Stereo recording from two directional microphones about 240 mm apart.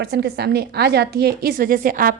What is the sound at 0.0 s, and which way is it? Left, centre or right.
A woman's voice, right.